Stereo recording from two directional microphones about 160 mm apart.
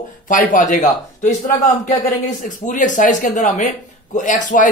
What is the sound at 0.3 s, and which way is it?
A man's voice, 55° left (ahead or behind).